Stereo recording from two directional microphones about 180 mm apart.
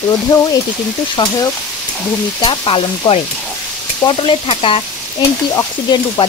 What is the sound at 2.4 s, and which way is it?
Speech, 30° left (ahead or behind).